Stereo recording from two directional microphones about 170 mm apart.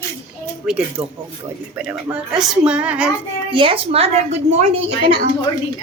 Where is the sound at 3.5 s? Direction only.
30° right (ahead or behind).